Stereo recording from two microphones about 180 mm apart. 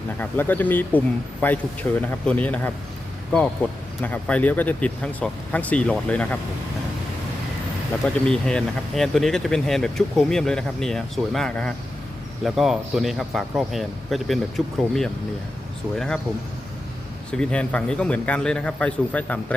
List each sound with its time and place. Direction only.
0.2 s speech: 10° left (ahead or behind)
4.0 s speech: 10° left (ahead or behind)
8.0 s speech: 5° left (ahead or behind)
17.3 s speech: 5° left (ahead or behind)